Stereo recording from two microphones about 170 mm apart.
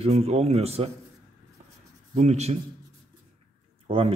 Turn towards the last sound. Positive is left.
turn(degrees=-35)  # may be behind; listen again after turning